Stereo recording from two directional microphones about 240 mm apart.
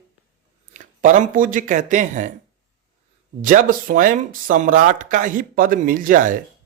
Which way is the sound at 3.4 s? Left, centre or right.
Right.